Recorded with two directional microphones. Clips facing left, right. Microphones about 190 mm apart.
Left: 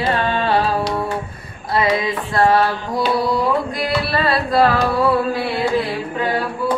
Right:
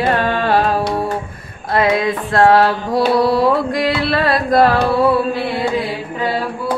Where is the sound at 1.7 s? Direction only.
55° right (ahead or behind); by 4.2 s 75° right (ahead or behind).